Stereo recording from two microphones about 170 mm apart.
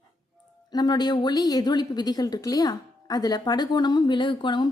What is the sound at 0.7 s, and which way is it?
A woman's voice, 25° left (ahead or behind).